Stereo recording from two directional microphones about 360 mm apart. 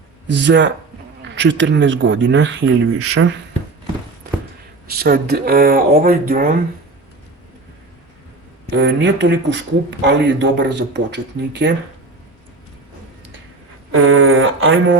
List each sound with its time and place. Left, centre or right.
0.3 s speech: right
4.9 s speech: right
8.7 s speech: right
13.9 s a sound: right